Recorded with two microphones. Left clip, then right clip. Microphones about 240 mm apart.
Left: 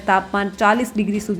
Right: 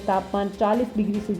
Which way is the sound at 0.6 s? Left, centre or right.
Centre.